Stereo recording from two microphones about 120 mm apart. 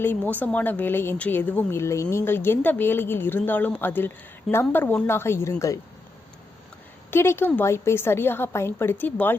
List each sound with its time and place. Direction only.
0.0 s a woman's voice: 15° left (ahead or behind)
7.1 s a woman's voice: 20° left (ahead or behind)